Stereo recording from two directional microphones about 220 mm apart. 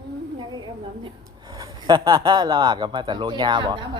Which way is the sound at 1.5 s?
15° right (ahead or behind).